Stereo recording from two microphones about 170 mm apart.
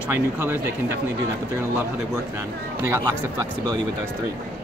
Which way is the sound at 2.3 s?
15° right (ahead or behind).